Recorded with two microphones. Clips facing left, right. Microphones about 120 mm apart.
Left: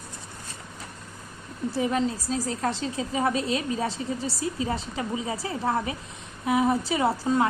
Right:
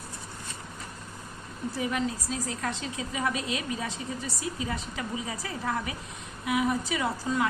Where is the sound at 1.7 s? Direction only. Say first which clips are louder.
Left 5 dB; 30° left (ahead or behind).